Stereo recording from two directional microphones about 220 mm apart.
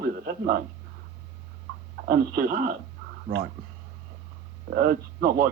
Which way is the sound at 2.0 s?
40° right (ahead or behind).